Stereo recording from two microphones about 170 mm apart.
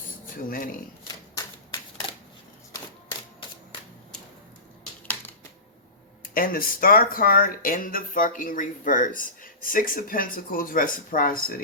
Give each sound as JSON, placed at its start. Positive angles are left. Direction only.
{"t": 0.5, "sound": "speech", "side_deg": 55}
{"t": 1.0, "sound": "typewriter", "side_deg": 20}
{"t": 5.0, "sound": "typewriter", "side_deg": 10}
{"t": 6.3, "sound": "speech", "side_deg": 55}